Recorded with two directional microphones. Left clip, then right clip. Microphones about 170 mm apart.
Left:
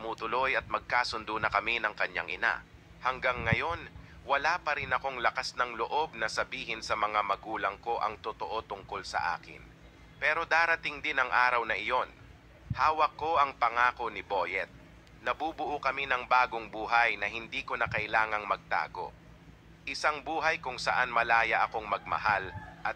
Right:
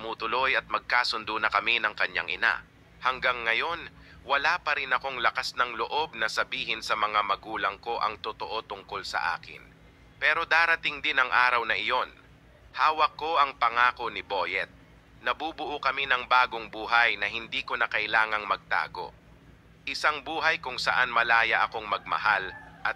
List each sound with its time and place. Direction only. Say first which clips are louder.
0.0 s speech: right 3 dB; 25° right (ahead or behind)